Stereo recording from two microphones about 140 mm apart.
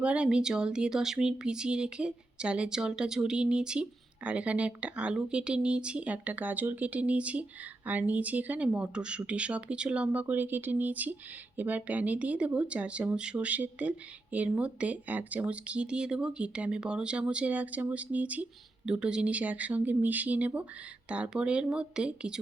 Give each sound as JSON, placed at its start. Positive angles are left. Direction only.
{"t": 0.0, "sound": "speech", "side_deg": -10}